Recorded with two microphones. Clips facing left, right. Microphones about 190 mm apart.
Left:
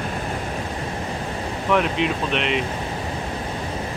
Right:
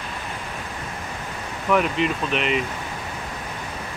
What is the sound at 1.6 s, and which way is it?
Speech, centre (ahead or behind).